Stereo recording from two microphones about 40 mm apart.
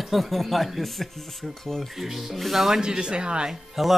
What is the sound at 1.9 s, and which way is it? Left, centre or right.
Speech, centre.